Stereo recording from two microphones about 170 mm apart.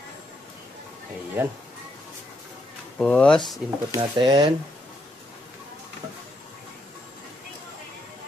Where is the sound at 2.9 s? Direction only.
5° left (ahead or behind).